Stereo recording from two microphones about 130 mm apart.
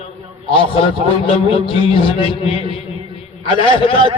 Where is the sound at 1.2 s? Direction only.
45° left (ahead or behind).